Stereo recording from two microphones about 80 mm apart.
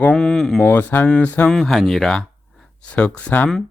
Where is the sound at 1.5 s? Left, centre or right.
Centre.